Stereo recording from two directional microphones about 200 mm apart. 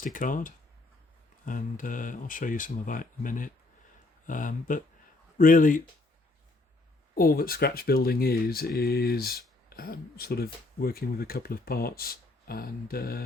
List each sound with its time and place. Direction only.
0.0 s speech: 40° left (ahead or behind)
7.2 s speech: 45° left (ahead or behind)